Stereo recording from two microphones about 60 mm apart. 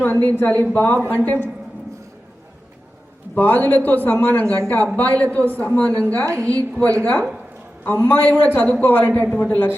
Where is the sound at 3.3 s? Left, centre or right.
Left.